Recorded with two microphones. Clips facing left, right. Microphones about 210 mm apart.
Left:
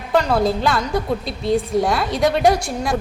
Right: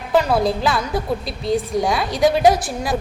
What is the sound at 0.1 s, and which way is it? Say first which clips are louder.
A woman's voice: even; 5° right (ahead or behind).